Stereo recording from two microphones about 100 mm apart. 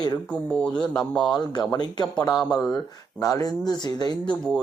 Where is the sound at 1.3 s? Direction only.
45° left (ahead or behind).